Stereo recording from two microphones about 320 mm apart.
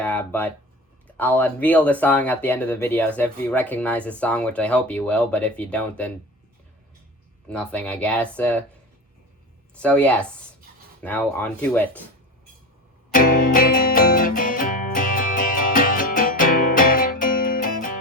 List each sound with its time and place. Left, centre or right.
0.0 s speech: centre
7.5 s speech: centre
9.8 s speech: centre
13.1 s music: left